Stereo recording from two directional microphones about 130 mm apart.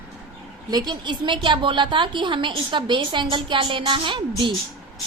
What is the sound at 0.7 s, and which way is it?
A woman's voice, 35° right (ahead or behind).